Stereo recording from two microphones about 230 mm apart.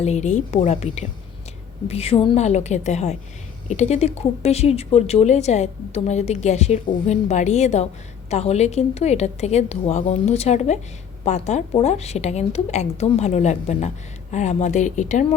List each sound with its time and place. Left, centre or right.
0.0 s a woman's voice: left